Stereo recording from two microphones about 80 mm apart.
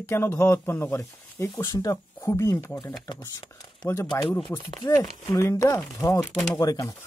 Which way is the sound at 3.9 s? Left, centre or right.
Left.